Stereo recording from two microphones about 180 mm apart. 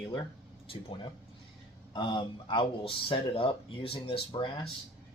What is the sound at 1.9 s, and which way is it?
Speech, 25° left (ahead or behind).